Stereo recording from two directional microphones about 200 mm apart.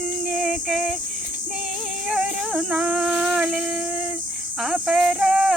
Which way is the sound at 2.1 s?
5° right (ahead or behind).